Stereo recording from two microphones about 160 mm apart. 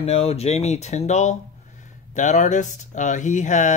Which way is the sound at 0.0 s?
40° left (ahead or behind).